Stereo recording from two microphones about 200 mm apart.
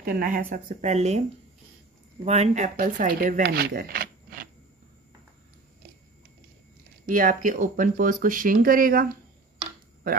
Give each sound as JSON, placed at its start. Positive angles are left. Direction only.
{"t": 0.0, "sound": "speech", "side_deg": -45}
{"t": 2.2, "sound": "speech", "side_deg": -35}
{"t": 7.1, "sound": "speech", "side_deg": -45}